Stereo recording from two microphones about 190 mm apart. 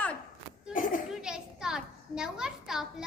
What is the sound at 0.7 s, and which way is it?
Children playing, 45° left (ahead or behind).